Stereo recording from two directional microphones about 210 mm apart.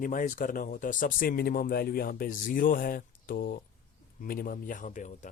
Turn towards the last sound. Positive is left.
turn(degrees=35)  # may be behind; listen again after turning